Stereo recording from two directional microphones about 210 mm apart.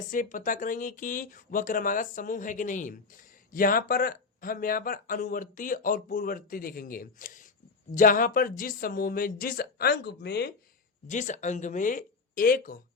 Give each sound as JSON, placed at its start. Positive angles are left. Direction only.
{"t": 0.1, "sound": "speech", "side_deg": 40}
{"t": 11.0, "sound": "speech", "side_deg": 35}